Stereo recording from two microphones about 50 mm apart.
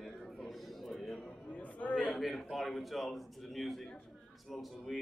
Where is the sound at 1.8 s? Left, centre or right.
Left.